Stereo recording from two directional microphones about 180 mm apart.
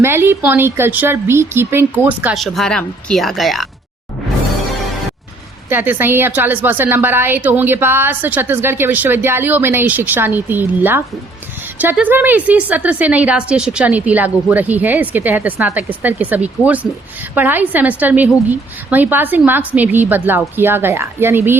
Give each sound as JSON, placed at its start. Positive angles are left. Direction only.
{"t": 0.0, "sound": "a woman's voice", "side_deg": -15}
{"t": 5.6, "sound": "a woman's voice", "side_deg": -10}